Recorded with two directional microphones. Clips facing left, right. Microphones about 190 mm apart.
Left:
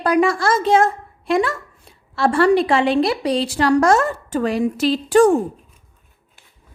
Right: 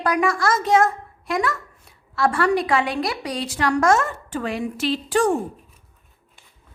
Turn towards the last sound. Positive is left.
turn(degrees=45)  # may be behind; listen again after turning